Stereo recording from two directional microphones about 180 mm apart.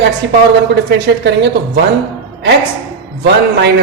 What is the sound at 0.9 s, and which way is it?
Speech, 75° right (ahead or behind).